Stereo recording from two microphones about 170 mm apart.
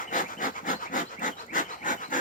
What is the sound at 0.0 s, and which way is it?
Wood, 50° left (ahead or behind).